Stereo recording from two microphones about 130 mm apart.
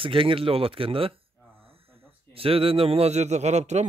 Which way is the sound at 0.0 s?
45° right (ahead or behind).